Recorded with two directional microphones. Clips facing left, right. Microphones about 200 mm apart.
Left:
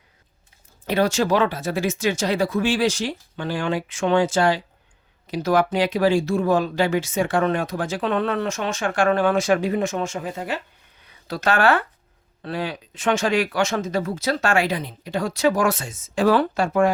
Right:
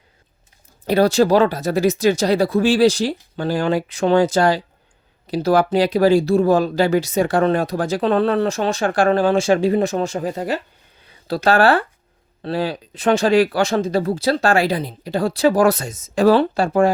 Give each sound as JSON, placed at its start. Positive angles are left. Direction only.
{"t": 0.9, "sound": "speech", "side_deg": -35}